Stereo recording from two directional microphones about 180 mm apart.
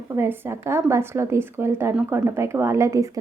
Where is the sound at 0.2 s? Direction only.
15° right (ahead or behind).